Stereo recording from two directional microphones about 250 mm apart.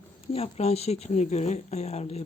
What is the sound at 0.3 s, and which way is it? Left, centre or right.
Speech, left.